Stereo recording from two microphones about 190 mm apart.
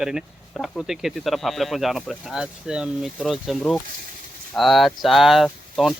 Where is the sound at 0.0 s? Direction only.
5° right (ahead or behind).